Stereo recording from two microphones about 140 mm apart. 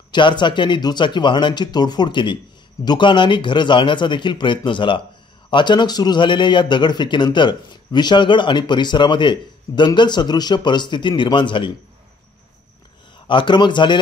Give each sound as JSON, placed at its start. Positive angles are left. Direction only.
{"t": 0.1, "sound": "a man's voice", "side_deg": 35}
{"t": 13.3, "sound": "a man's voice", "side_deg": 35}